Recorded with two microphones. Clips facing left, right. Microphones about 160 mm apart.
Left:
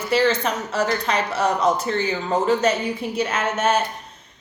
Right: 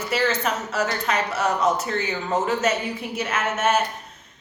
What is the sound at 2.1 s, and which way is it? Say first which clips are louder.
A woman's voice: left 4 dB; 5° right (ahead or behind).